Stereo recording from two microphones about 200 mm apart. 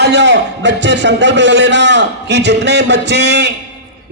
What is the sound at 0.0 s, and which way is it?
A man's voice, 60° right (ahead or behind).